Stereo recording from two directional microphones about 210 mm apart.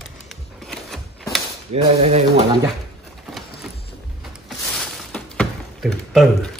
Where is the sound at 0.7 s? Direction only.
Centre (ahead or behind).